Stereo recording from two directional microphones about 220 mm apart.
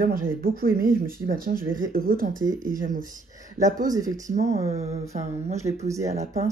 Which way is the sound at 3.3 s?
15° right (ahead or behind).